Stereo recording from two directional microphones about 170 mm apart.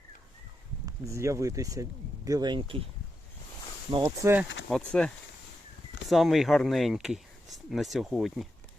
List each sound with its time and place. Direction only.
0.9 s speech: 20° right (ahead or behind)
4.0 s speech: 15° right (ahead or behind)
4.7 s speech: 5° left (ahead or behind)